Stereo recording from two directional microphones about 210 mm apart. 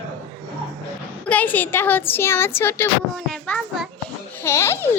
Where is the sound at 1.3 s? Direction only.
10° left (ahead or behind).